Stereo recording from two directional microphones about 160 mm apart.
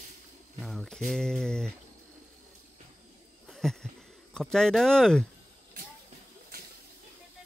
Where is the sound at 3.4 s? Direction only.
5° left (ahead or behind).